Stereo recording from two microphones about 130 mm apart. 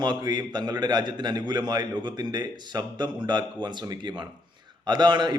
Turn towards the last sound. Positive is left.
turn(degrees=-35)  # may be behind; listen again after turning